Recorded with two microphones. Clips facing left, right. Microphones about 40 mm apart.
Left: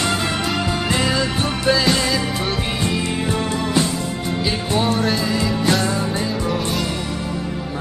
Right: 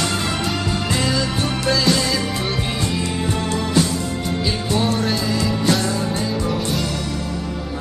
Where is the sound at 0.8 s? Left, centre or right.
Left.